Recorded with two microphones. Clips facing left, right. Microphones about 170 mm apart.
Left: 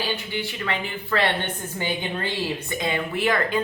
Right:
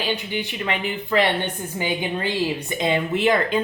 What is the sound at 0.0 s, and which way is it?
A woman's voice, 20° right (ahead or behind).